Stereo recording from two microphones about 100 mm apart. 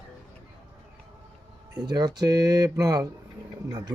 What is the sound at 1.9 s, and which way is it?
Speech, 40° right (ahead or behind).